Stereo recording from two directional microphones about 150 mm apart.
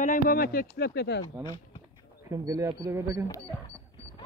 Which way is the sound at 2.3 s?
20° right (ahead or behind).